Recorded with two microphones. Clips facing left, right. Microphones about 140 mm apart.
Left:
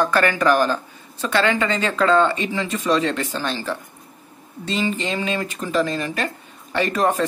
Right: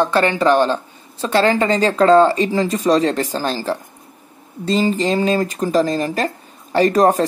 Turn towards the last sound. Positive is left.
turn(degrees=-40)  # may be behind; listen again after turning